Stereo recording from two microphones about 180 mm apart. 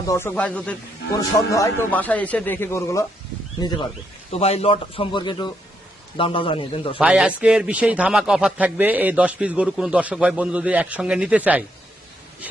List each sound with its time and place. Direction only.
0.0 s a man's voice: 15° left (ahead or behind)
1.1 s a man's voice: 20° left (ahead or behind)
4.3 s a man's voice: 35° left (ahead or behind)
7.0 s a man's voice: 5° right (ahead or behind)